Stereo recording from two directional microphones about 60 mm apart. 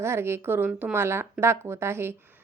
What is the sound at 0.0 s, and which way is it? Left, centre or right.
Speech, right.